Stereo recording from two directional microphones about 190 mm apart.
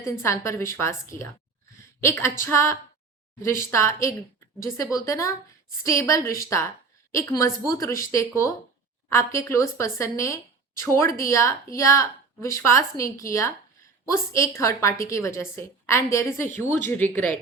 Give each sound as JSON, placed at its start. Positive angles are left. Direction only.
{"t": 0.0, "sound": "a woman's voice", "side_deg": 15}